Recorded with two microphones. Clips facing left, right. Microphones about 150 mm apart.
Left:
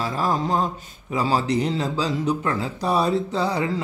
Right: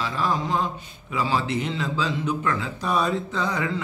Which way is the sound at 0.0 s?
40° left (ahead or behind).